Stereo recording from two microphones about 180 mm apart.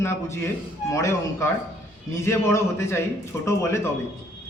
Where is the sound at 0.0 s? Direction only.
15° left (ahead or behind).